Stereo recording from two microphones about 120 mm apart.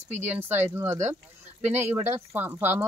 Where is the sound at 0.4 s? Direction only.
20° right (ahead or behind).